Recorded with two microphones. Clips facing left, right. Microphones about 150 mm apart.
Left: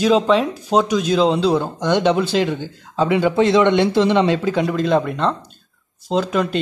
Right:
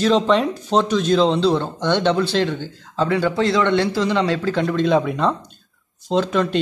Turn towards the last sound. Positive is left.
turn(degrees=5)  # may be behind; listen again after turning